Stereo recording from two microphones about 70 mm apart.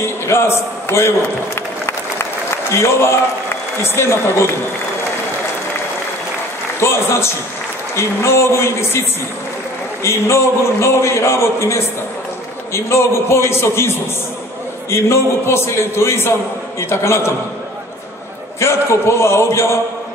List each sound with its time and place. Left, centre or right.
0.3 s a man's voice: left
6.8 s a man's voice: left
10.0 s a man's voice: left
18.6 s a man's voice: left